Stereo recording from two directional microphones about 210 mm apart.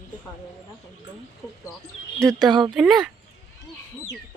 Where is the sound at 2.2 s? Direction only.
Centre (ahead or behind).